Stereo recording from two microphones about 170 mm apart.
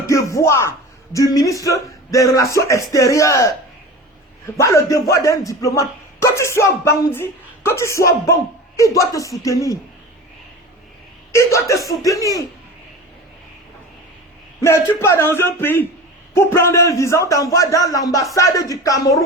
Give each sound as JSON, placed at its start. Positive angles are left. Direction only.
{"t": 0.1, "sound": "music", "side_deg": 15}
{"t": 1.1, "sound": "speech", "side_deg": 20}
{"t": 4.5, "sound": "speech", "side_deg": 20}
{"t": 11.3, "sound": "speech", "side_deg": 15}
{"t": 14.6, "sound": "speech", "side_deg": 15}